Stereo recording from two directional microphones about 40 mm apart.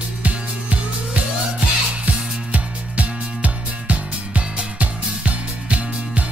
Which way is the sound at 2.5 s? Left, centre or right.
Right.